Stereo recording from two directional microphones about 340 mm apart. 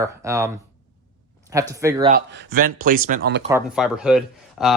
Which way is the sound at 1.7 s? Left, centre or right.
Centre.